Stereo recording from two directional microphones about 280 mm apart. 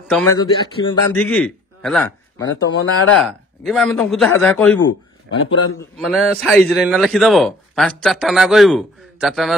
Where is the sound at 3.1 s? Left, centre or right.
Centre.